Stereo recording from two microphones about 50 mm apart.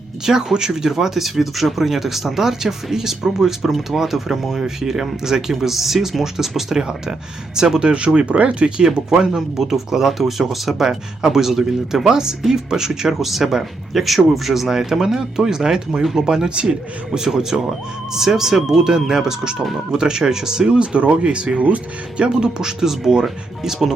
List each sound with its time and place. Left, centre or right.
0.3 s speech: centre